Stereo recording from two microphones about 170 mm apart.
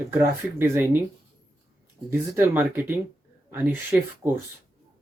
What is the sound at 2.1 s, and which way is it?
Speech, 10° right (ahead or behind).